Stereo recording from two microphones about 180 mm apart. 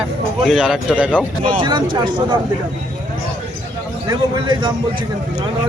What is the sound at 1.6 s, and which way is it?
Speech, 25° right (ahead or behind).